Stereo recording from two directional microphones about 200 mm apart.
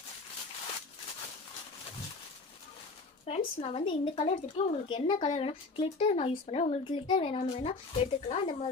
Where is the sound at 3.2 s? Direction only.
30° left (ahead or behind).